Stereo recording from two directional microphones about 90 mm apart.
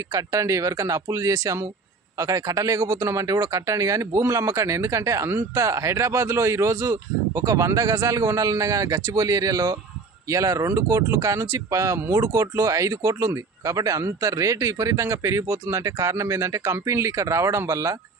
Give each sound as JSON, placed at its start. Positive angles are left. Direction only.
{"t": 0.1, "sound": "speech", "side_deg": -40}